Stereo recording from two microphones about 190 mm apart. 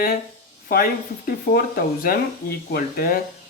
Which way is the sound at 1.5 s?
50° left (ahead or behind).